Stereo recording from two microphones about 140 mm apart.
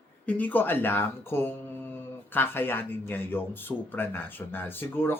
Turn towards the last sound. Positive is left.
turn(degrees=15)  # may be behind; listen again after turning